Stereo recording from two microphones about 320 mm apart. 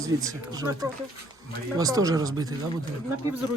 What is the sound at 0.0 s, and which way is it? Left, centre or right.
Speech, centre.